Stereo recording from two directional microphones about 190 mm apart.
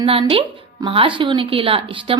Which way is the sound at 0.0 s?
30° right (ahead or behind).